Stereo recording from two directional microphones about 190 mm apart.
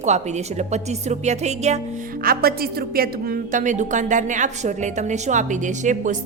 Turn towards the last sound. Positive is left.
turn(degrees=-40)  # may be behind; listen again after turning